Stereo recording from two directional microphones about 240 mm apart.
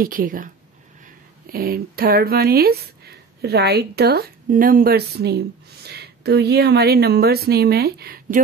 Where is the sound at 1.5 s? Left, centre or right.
Right.